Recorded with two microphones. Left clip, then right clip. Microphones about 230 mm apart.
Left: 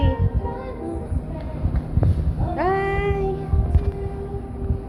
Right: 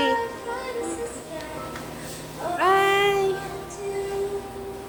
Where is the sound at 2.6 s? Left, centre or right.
Right.